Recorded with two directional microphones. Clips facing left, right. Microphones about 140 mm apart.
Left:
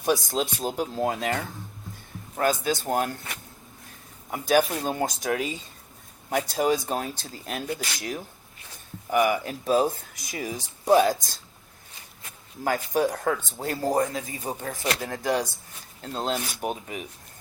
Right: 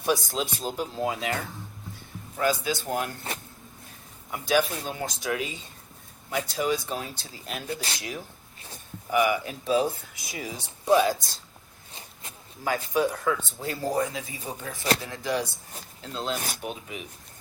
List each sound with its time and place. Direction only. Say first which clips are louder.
0.3 s speech: left 3 dB; 50° left (ahead or behind)
2.4 s speech: left 2 dB; 45° left (ahead or behind)
4.3 s speech: left 3 dB; 45° left (ahead or behind)
7.7 s speech: left 1 dB; 30° right (ahead or behind)
9.1 s speech: left 1 dB; 45° left (ahead or behind)
12.6 s speech: left 1 dB; 45° left (ahead or behind)
16.3 s speech: even; 45° right (ahead or behind)
16.6 s speech: left 5 dB; 45° left (ahead or behind)